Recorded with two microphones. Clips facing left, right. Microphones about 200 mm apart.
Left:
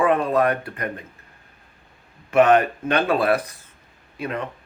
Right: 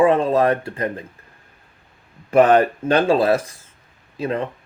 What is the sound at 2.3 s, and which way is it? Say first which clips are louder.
Speech: right 2 dB; 35° right (ahead or behind).